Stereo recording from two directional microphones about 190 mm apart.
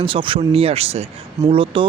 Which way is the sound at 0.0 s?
25° right (ahead or behind).